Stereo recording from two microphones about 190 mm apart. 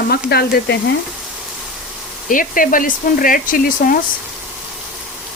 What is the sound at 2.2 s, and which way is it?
Speech, 45° left (ahead or behind).